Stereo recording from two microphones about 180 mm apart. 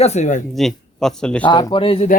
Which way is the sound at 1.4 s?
25° left (ahead or behind).